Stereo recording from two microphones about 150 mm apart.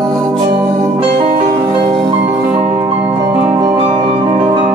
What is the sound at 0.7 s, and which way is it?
Music, 50° right (ahead or behind).